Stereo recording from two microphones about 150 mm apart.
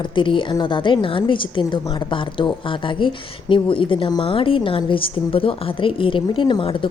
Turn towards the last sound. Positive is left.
turn(degrees=35)  # may be behind; listen again after turning